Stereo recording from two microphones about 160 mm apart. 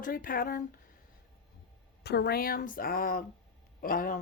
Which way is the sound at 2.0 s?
85° left.